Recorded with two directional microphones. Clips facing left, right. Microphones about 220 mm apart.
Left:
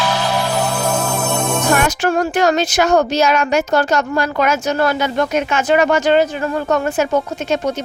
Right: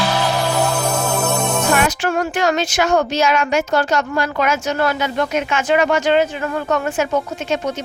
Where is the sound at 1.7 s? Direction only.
45° left (ahead or behind).